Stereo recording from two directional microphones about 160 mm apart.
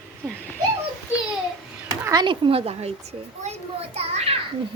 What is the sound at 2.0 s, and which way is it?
A child's voice, 25° right (ahead or behind).